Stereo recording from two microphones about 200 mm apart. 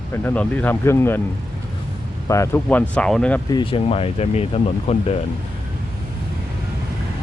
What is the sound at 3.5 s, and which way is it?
Speech, 25° left (ahead or behind).